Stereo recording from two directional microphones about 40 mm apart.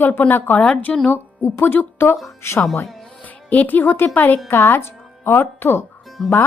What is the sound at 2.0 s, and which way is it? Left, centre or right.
Speech, left.